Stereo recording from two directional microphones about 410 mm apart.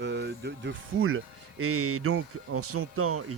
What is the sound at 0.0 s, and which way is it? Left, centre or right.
Speech, right.